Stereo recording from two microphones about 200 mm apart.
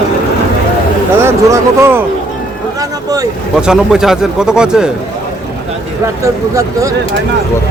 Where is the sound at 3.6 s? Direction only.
5° right (ahead or behind).